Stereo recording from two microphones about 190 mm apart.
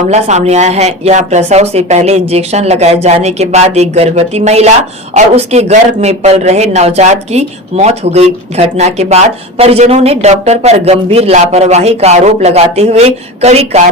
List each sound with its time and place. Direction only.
0.1 s speech: 35° right (ahead or behind)